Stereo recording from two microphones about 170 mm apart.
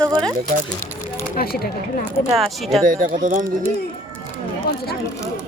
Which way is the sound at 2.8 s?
50° right (ahead or behind).